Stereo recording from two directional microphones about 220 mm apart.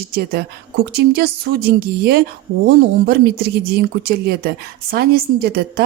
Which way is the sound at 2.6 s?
45° right (ahead or behind).